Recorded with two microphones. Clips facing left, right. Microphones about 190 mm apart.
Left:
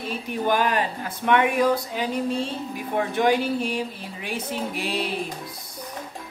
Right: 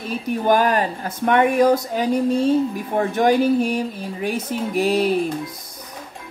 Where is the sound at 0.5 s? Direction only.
45° right (ahead or behind).